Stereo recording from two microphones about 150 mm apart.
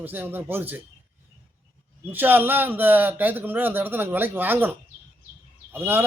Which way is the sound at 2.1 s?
15° right (ahead or behind).